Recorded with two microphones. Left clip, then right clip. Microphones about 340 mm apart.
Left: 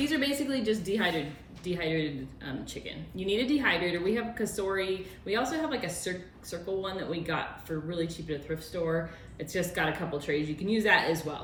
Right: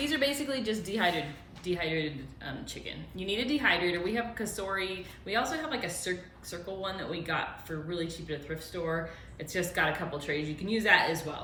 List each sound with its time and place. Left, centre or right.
0.0 s a woman's voice: centre